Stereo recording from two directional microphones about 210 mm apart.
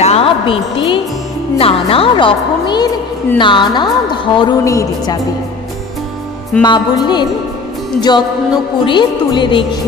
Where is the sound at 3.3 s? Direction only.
20° left (ahead or behind).